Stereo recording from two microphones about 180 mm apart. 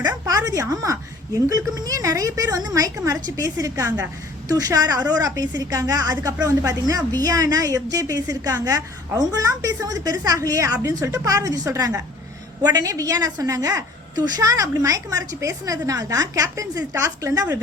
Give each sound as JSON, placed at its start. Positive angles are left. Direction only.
{"t": 0.1, "sound": "a woman's voice", "side_deg": -20}